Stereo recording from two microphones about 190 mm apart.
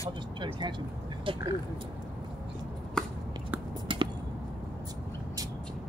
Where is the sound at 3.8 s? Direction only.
25° right (ahead or behind).